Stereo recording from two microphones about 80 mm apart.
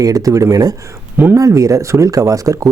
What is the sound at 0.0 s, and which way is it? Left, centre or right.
Speech, right.